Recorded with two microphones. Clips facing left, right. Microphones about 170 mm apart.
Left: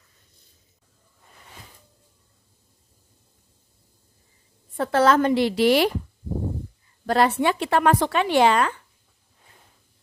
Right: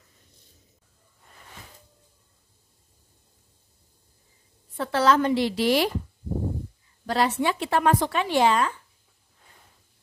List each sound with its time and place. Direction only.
4.7 s a woman's voice: 50° left (ahead or behind)
7.1 s speech: 55° left (ahead or behind)